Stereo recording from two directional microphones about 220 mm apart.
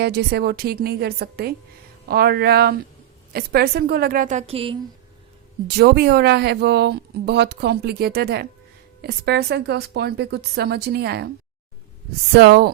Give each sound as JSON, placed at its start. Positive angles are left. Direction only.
{"t": 0.0, "sound": "a woman's voice", "side_deg": -45}
{"t": 5.6, "sound": "a woman's voice", "side_deg": -45}
{"t": 12.3, "sound": "a woman's voice", "side_deg": -50}